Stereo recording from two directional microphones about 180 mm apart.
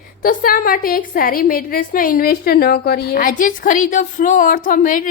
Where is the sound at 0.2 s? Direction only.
50° left (ahead or behind).